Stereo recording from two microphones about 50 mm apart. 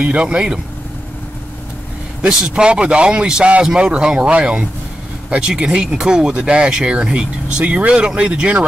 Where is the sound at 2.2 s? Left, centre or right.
Centre.